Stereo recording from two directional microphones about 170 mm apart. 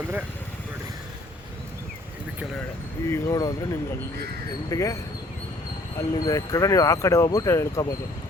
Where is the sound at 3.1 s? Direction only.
20° left (ahead or behind).